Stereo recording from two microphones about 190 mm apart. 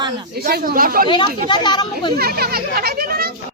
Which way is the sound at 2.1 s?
55° right (ahead or behind).